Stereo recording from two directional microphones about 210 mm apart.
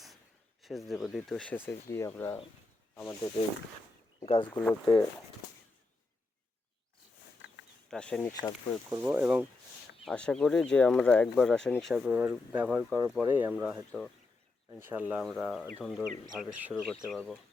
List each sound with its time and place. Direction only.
0.6 s speech: centre (ahead or behind)
4.2 s speech: 20° left (ahead or behind)
7.9 s speech: 5° left (ahead or behind)
8.3 s speech: 15° left (ahead or behind)
8.9 s speech: 10° right (ahead or behind)
10.1 s speech: 5° left (ahead or behind)